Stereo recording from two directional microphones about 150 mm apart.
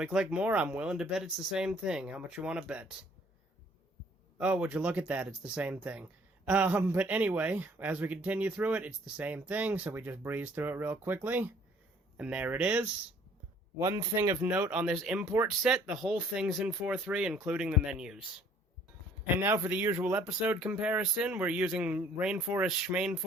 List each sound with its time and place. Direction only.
0.0 s speech: 5° right (ahead or behind)
4.4 s speech: 10° right (ahead or behind)
13.7 s speech: 20° right (ahead or behind)
14.4 s speech: 10° right (ahead or behind)
19.4 s speech: 15° right (ahead or behind)